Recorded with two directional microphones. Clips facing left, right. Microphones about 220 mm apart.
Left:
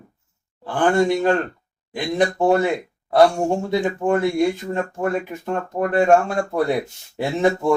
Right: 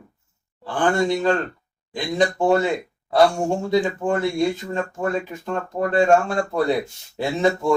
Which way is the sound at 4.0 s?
15° left (ahead or behind).